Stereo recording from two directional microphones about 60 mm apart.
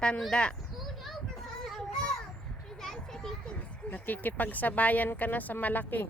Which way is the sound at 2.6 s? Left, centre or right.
Centre.